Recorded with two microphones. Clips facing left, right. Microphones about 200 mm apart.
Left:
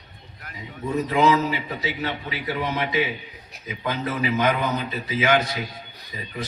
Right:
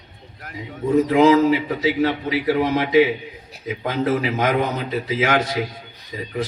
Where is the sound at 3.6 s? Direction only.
65° right (ahead or behind).